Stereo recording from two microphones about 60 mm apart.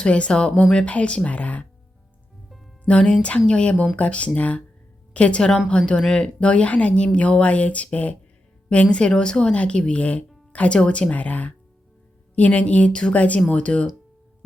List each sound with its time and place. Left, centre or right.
0.0 s speech: centre
2.8 s speech: centre